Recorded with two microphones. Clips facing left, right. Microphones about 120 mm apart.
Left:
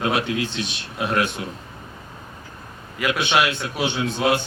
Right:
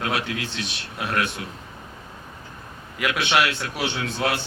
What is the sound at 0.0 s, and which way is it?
A man's voice, 20° left (ahead or behind).